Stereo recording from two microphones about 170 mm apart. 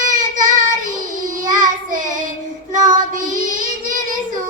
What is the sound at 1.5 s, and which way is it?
Child singing, 50° right (ahead or behind).